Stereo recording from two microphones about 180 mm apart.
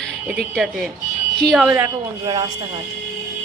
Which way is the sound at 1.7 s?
10° right (ahead or behind).